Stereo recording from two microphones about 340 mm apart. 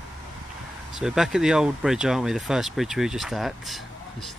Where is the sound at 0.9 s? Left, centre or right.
Centre.